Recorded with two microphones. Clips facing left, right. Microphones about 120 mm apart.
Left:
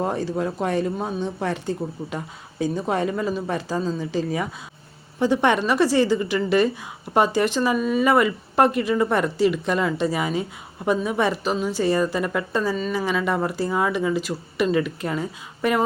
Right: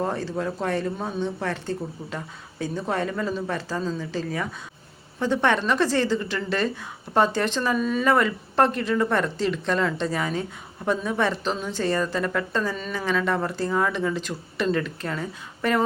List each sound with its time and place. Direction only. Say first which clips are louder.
0.0 s speech: left 3 dB; 15° left (ahead or behind)